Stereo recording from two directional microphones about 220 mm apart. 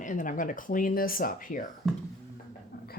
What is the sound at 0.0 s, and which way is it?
Speech, 35° left (ahead or behind).